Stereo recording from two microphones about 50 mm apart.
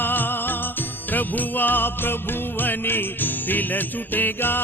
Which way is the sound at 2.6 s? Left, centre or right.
Left.